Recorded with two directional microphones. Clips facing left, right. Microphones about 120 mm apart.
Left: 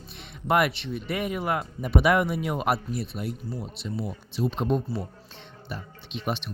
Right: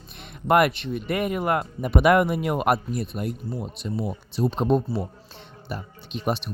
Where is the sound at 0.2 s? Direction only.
50° right (ahead or behind).